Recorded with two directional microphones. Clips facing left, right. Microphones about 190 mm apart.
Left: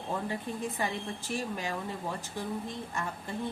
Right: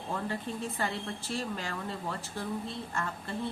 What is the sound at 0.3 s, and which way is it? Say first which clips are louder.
Speech: left 1 dB; 15° left (ahead or behind).